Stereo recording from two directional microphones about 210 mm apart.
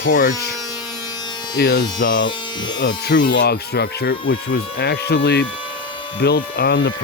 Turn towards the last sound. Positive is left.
turn(degrees=50)  # may be behind; listen again after turning